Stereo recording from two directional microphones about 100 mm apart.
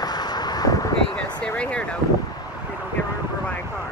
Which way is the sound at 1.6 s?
10° left (ahead or behind).